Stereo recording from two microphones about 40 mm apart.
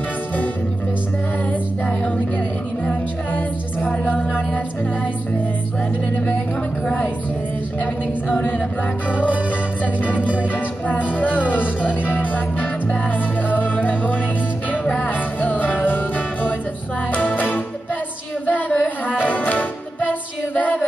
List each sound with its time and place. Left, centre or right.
1.5 s music: left
4.0 s a sound: left
10.5 s music: left
17.1 s music: left